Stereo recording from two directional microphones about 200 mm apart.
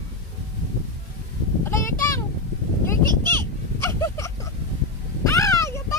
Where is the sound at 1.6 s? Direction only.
15° left (ahead or behind).